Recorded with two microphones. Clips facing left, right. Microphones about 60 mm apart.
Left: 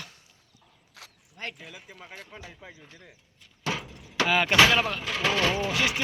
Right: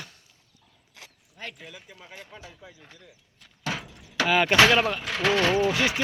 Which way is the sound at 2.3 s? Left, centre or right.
Left.